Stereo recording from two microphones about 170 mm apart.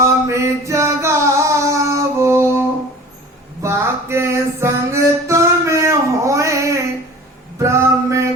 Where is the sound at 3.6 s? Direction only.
15° right (ahead or behind).